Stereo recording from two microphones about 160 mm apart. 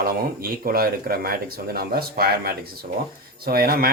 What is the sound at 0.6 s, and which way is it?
Speech, 65° right (ahead or behind).